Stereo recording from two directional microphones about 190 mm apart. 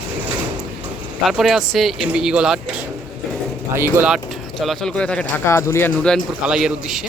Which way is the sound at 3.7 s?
15° right (ahead or behind).